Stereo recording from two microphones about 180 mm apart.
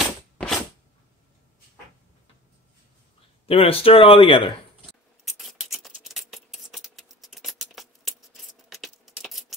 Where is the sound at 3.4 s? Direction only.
30° left (ahead or behind).